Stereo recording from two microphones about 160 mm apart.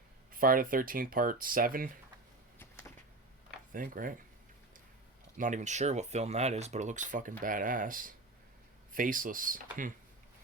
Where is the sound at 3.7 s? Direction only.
60° right (ahead or behind).